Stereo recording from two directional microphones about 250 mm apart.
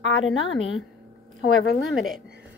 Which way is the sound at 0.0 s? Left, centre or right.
Left.